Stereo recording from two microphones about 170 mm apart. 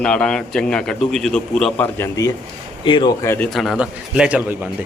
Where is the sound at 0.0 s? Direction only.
5° left (ahead or behind).